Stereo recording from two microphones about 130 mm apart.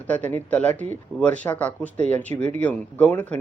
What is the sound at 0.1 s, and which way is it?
A man's voice, 10° left (ahead or behind).